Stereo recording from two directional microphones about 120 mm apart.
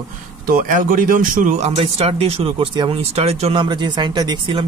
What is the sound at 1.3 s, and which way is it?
Speech, 80° right.